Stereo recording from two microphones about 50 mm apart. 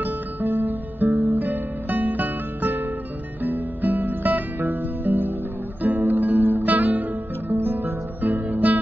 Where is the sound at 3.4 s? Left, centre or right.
Right.